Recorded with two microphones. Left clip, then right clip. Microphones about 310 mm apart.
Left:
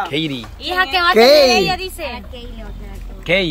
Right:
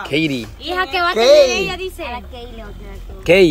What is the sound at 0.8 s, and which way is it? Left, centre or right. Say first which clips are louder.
Speech: left 4 dB; centre.